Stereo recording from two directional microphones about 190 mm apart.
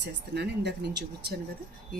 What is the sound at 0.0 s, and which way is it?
Speech, 65° right (ahead or behind).